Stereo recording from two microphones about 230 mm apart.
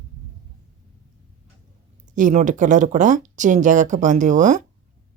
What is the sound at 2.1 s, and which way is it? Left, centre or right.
Speech, right.